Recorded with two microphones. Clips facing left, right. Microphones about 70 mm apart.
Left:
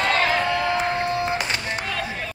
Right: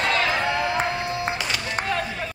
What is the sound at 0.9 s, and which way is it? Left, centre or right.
Music, left.